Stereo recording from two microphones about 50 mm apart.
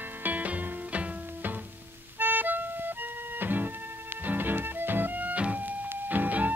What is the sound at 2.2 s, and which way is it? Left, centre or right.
Music, right.